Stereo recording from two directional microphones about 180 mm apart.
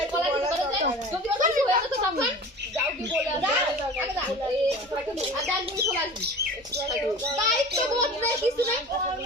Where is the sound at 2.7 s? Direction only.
5° right (ahead or behind).